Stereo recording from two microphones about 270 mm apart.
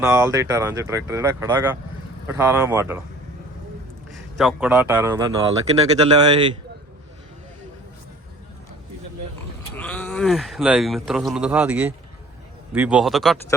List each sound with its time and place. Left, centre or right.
0.0 s speech: centre
4.1 s speech: centre
9.7 s speech: centre